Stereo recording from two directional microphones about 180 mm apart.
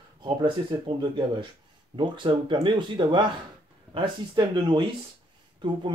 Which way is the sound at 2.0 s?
25° right (ahead or behind).